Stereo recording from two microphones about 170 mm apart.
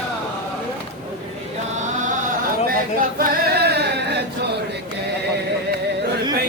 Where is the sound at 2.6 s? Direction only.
55° right (ahead or behind); by 4.2 s 75° right (ahead or behind).